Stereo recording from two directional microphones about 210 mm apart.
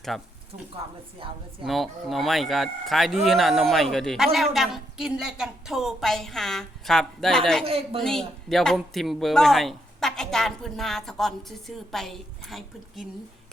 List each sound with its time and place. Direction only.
0.1 s speech: centre (ahead or behind)
1.2 s a woman's voice: 25° right (ahead or behind)
1.6 s speech: centre (ahead or behind)